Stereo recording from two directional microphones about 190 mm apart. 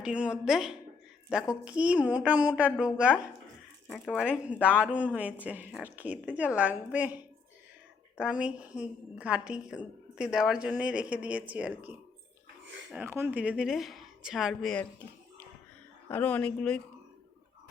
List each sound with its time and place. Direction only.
0.0 s a woman's voice: 5° right (ahead or behind)
8.2 s a woman's voice: 5° right (ahead or behind)
12.6 s a sound: 75° right (ahead or behind)
12.9 s a woman's voice: 10° right (ahead or behind); by 16.8 s 5° left (ahead or behind)